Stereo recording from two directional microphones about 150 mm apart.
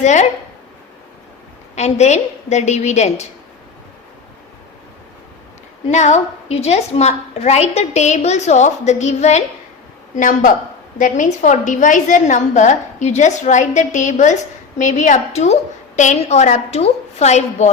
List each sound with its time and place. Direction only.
0.0 s a woman's voice: 50° left (ahead or behind)
1.7 s a woman's voice: 50° left (ahead or behind)
5.9 s a woman's voice: 50° left (ahead or behind)
10.2 s a woman's voice: 60° left (ahead or behind)